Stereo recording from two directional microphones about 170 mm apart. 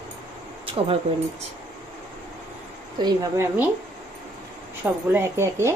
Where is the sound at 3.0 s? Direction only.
15° right (ahead or behind).